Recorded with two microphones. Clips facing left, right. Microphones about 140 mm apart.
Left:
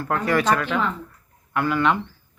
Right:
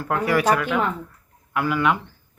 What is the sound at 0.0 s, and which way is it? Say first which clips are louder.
Speech: right 1 dB; 10° right (ahead or behind).